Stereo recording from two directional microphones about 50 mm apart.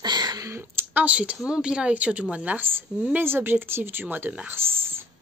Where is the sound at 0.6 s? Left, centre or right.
Right.